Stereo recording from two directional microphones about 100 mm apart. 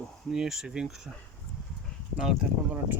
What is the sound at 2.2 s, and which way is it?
Speech, 5° right (ahead or behind).